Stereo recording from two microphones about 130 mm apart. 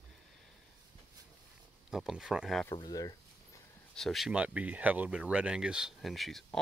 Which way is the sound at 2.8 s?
30° left (ahead or behind).